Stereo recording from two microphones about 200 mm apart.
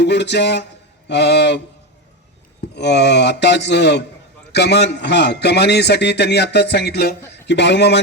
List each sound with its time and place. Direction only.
0.0 s a sound: 60° left (ahead or behind)
1.0 s a man's voice: 60° left (ahead or behind)
2.7 s a man's voice: 60° left (ahead or behind)